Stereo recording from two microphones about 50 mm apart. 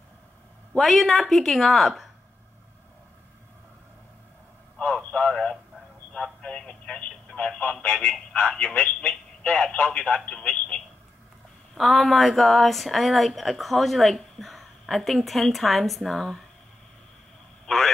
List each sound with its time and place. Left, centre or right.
0.7 s a woman's voice: centre
4.9 s radio: left
6.4 s telephone: left
7.2 s speech: left
8.7 s speech: left
11.7 s a woman's voice: centre
17.6 s a man's voice: centre